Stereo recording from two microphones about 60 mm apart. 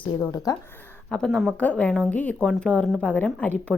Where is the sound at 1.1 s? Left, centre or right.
Centre.